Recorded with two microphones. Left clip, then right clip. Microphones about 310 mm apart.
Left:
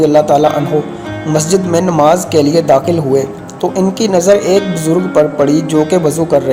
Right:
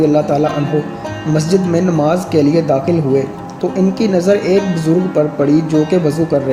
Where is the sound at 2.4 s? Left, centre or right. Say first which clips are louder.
Left 3 dB; left.